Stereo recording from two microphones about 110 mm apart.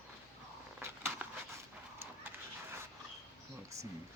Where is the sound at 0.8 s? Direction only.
20° right (ahead or behind).